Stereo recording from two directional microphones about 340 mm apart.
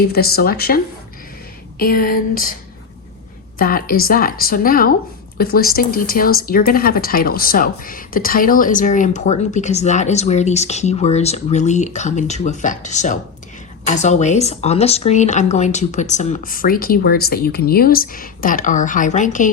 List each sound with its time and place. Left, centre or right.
0.1 s speech: left
1.8 s speech: left
3.6 s speech: left